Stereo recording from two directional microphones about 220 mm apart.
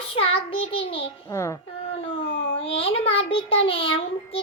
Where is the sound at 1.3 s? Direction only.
10° left (ahead or behind).